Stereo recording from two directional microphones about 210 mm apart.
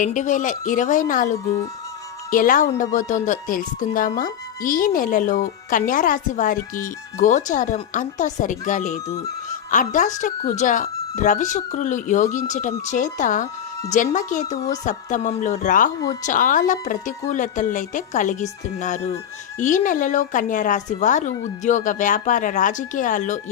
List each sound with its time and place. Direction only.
0.0 s speech: 35° left (ahead or behind)